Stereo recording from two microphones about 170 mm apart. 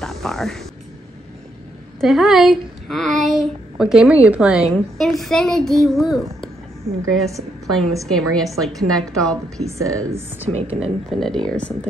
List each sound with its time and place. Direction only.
0.0 s speech: centre (ahead or behind)
2.0 s speech: centre (ahead or behind)
7.6 s a woman's voice: centre (ahead or behind)
9.8 s speech: 15° right (ahead or behind)
10.8 s speech: centre (ahead or behind)